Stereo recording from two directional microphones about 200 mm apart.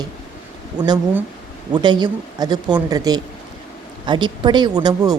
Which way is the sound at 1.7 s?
20° right (ahead or behind).